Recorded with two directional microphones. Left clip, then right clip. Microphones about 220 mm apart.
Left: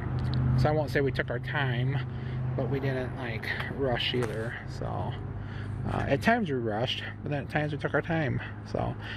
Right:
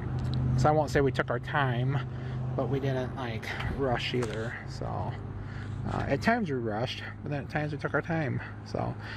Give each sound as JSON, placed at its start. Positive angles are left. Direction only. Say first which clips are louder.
{"t": 0.1, "sound": "speech", "louder": "left 1 dB", "side_deg": -15}